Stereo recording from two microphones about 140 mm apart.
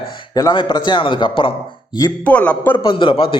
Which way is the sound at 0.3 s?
30° left (ahead or behind).